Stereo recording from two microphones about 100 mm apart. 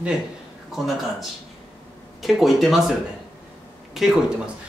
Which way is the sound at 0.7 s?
5° right (ahead or behind).